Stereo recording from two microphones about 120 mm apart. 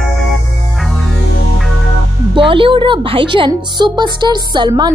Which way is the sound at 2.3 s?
45° right (ahead or behind).